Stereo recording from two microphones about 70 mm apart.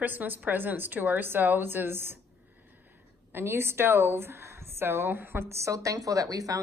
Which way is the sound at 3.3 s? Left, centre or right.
Right.